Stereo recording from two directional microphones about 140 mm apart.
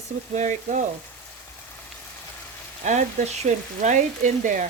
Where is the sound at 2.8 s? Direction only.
60° right (ahead or behind).